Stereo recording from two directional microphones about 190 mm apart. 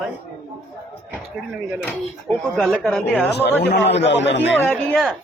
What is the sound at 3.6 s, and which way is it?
Speech, 65° left (ahead or behind).